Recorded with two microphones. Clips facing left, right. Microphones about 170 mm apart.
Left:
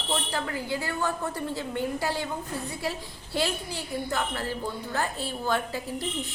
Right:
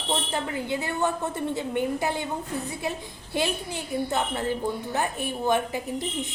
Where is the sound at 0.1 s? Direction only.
20° right (ahead or behind).